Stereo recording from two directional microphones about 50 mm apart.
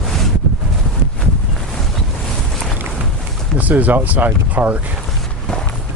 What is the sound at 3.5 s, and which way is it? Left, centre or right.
Speech, right.